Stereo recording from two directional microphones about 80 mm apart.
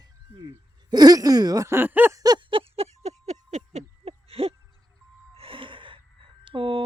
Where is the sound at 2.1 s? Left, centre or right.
Right.